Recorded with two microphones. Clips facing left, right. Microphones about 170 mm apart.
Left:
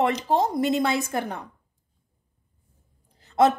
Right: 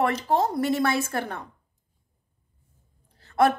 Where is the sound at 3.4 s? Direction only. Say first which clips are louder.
Left 2 dB; 20° left (ahead or behind).